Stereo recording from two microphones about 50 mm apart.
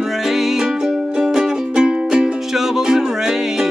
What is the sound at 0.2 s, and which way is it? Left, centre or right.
Music, centre.